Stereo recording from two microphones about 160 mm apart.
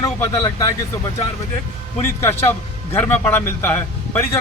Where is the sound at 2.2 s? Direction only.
15° left (ahead or behind).